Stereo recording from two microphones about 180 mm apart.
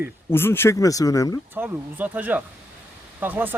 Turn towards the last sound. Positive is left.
turn(degrees=-10)  # may be behind; listen again after turning